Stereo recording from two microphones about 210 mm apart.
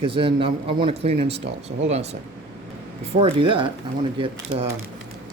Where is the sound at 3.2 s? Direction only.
25° right (ahead or behind).